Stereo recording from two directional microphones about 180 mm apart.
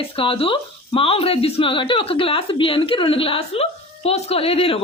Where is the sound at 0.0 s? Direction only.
30° left (ahead or behind).